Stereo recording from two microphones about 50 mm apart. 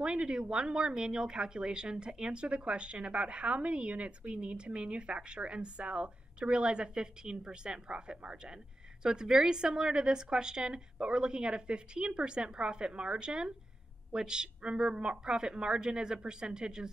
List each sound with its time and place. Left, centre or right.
0.0 s a woman's voice: centre